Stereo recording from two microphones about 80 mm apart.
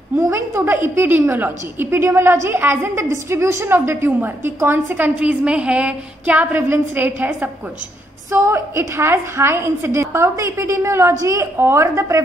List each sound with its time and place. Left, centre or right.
0.3 s a woman's voice: right
8.3 s a woman's voice: right